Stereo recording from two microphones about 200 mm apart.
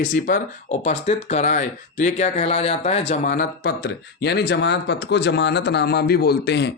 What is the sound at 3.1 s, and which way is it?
Speech, 40° left (ahead or behind).